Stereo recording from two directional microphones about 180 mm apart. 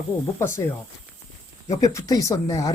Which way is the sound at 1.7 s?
20° left (ahead or behind).